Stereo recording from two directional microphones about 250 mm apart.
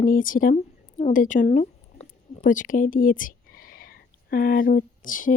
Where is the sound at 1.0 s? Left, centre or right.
Left.